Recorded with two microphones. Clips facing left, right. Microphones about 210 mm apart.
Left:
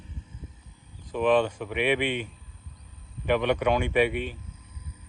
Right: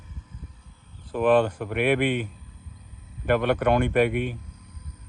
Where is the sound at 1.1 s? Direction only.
5° right (ahead or behind).